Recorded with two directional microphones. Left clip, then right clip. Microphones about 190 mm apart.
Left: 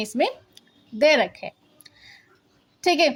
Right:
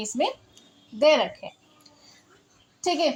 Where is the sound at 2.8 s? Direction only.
50° left (ahead or behind).